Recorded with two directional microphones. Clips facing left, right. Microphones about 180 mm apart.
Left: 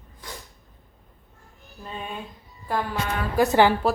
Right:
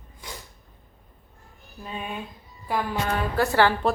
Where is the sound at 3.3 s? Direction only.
15° left (ahead or behind).